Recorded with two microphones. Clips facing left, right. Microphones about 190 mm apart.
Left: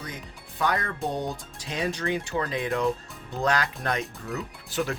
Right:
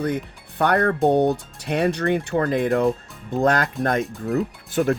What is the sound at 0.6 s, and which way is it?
Speech, 60° right (ahead or behind).